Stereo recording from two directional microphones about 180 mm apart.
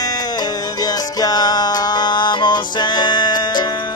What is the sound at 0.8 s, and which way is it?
Music, 20° left (ahead or behind).